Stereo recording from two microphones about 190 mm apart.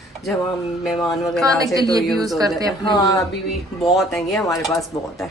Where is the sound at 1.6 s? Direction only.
20° right (ahead or behind).